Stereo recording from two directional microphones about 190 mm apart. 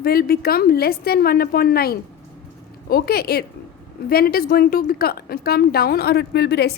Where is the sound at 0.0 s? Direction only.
50° left (ahead or behind).